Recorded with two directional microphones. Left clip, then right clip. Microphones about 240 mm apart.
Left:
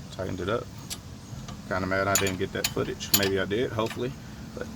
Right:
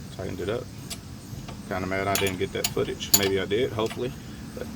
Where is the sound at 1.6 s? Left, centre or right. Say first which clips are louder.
Left 1 dB; left.